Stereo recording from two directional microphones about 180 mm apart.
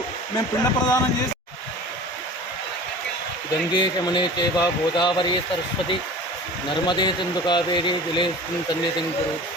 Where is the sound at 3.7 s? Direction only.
25° left (ahead or behind).